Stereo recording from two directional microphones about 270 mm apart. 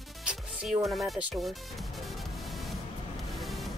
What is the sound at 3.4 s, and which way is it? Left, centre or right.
Music, centre.